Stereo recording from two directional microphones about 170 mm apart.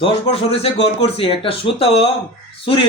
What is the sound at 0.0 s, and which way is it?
A man's voice, 35° left (ahead or behind).